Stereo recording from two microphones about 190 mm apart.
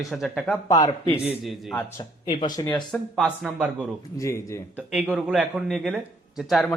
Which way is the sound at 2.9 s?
5° left (ahead or behind).